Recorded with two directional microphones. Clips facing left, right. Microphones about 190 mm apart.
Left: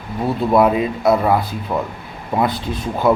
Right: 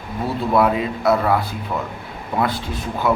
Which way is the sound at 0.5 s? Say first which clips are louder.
Left 3 dB; 20° left (ahead or behind).